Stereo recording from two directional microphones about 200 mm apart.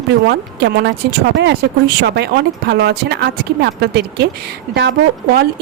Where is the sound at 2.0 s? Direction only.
55° right (ahead or behind).